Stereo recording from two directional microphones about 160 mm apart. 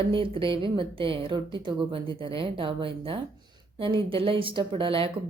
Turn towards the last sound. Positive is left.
turn(degrees=-35)  # may be behind; listen again after turning